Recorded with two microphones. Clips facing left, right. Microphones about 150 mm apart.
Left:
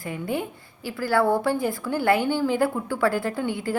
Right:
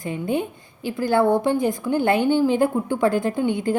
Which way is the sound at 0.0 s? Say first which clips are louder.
Right 4 dB; 20° right (ahead or behind).